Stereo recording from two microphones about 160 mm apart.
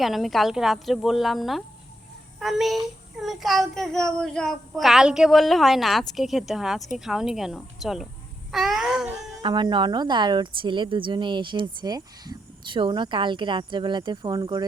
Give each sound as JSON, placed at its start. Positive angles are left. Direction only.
{"t": 0.0, "sound": "a child's voice", "side_deg": 0}
{"t": 8.5, "sound": "babbling", "side_deg": 0}
{"t": 9.4, "sound": "speech", "side_deg": -25}